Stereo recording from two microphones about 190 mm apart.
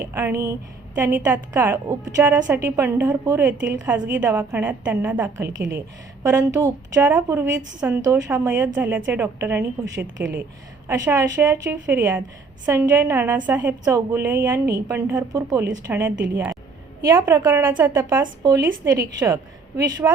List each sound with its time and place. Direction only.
0.0 s a woman's voice: 15° right (ahead or behind)
10.2 s speech: 75° right (ahead or behind)
10.8 s a woman's voice: 15° right (ahead or behind)